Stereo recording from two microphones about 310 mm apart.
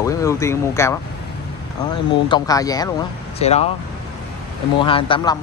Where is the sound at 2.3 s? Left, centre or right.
Centre.